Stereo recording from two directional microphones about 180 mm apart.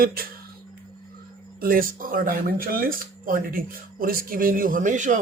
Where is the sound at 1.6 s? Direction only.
50° right (ahead or behind).